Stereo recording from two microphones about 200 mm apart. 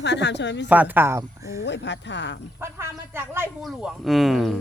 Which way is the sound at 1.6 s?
60° left (ahead or behind).